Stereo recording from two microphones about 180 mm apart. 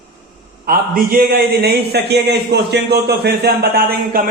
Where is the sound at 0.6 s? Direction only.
55° right (ahead or behind).